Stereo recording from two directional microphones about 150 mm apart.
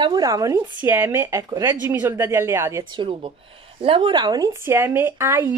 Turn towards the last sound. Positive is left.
turn(degrees=-15)  # may be behind; listen again after turning